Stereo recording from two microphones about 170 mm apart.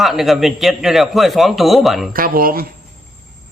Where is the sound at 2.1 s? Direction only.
60° right (ahead or behind).